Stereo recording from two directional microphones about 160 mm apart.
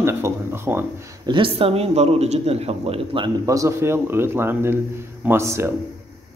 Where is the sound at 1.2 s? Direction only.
30° right (ahead or behind).